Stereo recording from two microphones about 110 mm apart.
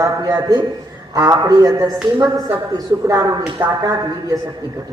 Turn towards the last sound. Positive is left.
turn(degrees=-35)  # may be behind; listen again after turning